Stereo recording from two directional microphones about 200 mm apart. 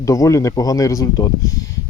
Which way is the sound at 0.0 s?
15° left (ahead or behind).